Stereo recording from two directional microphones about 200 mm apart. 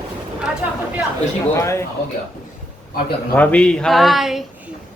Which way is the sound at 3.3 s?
5° left (ahead or behind).